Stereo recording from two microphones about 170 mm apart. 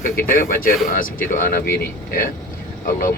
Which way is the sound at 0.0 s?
55° left (ahead or behind).